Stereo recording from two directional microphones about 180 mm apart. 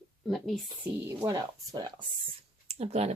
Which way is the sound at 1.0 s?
15° right (ahead or behind).